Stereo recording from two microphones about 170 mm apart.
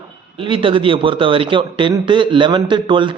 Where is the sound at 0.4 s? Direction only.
30° right (ahead or behind).